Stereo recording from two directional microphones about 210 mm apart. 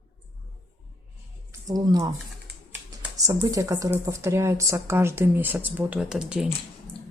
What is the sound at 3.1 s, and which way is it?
Speech, 15° right (ahead or behind).